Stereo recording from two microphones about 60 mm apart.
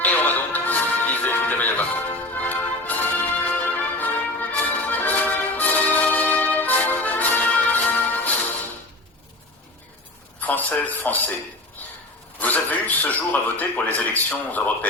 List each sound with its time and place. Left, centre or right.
0.0 s music: left
10.4 s a sound: left
12.4 s a man's voice: left